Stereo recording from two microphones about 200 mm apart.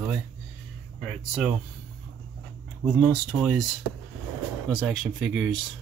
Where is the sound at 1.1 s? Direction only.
Centre (ahead or behind).